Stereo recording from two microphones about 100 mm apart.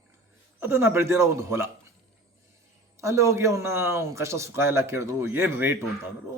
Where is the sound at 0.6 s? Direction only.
25° right (ahead or behind).